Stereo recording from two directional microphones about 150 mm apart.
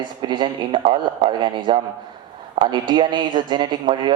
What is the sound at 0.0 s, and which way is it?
Speech, 30° right (ahead or behind).